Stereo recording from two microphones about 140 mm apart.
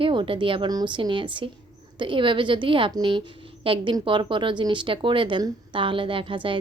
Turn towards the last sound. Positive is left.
turn(degrees=-35)  # may be behind; listen again after turning